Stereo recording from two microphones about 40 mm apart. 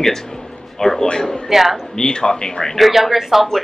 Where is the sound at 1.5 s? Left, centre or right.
Centre.